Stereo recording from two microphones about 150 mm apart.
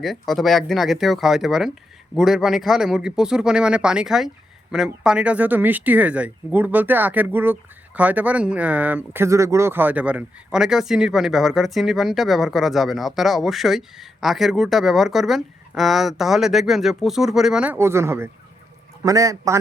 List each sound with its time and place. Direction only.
0.0 s a man's voice: centre (ahead or behind); by 19.5 s 20° right (ahead or behind)